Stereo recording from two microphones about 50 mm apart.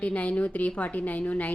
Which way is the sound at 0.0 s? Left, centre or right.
Left.